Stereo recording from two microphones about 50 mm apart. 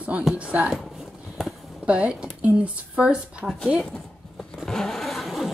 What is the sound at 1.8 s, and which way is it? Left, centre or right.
Speech, right.